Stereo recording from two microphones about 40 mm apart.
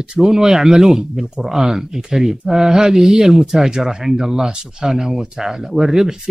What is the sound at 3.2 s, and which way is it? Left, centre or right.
Speech, centre.